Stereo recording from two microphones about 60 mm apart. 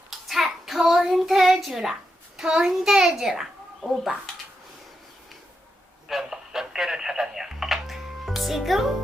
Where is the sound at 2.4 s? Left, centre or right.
Centre.